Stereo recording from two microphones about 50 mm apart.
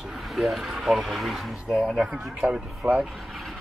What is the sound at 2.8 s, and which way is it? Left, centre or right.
Speech, right.